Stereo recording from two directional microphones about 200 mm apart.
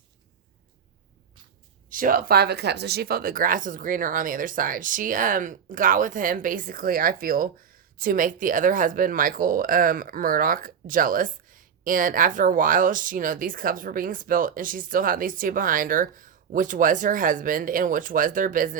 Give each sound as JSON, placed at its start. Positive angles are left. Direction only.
{"t": 1.9, "sound": "speech", "side_deg": -45}